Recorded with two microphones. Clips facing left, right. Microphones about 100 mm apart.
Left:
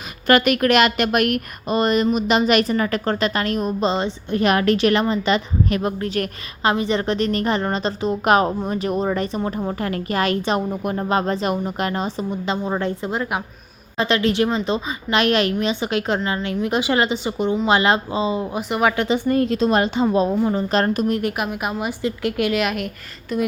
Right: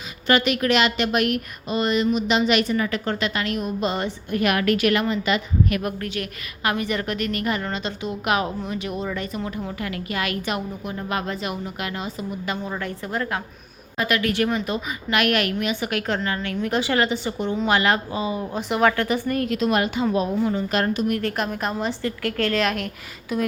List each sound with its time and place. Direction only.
0.3 s a woman's voice: 55° left (ahead or behind)
3.8 s a woman's voice: 25° left (ahead or behind)
10.7 s a woman's voice: 50° left (ahead or behind)
11.1 s a woman's voice: 35° left (ahead or behind)
18.5 s a woman's voice: 5° left (ahead or behind)
18.9 s a woman's voice: 20° left (ahead or behind); by 21.1 s 40° left (ahead or behind)
21.2 s a woman's voice: 10° left (ahead or behind)